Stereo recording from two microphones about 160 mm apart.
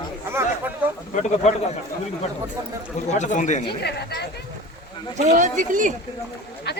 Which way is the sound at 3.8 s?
90° left.